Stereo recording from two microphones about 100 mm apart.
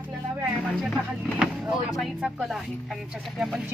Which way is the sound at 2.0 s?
Centre (ahead or behind).